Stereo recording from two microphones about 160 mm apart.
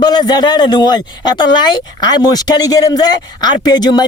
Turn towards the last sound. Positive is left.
turn(degrees=25)  # may be behind; listen again after turning